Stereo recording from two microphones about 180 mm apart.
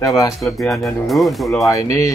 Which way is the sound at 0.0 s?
20° left (ahead or behind).